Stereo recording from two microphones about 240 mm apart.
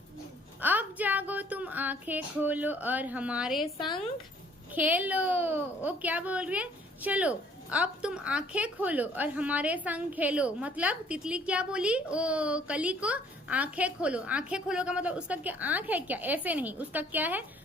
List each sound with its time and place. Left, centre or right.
0.6 s female singing: centre
3.8 s speech: centre
4.7 s a woman's voice: centre